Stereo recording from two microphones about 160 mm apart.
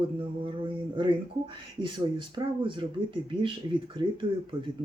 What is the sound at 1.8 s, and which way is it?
Speech, 30° right (ahead or behind).